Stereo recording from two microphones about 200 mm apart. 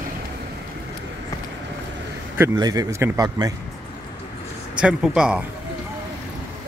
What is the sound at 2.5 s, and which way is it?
A man's voice, 20° right (ahead or behind).